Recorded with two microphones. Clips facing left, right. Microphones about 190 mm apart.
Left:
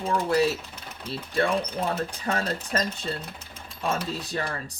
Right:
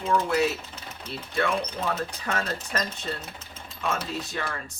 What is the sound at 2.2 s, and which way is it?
Speech, 35° left (ahead or behind).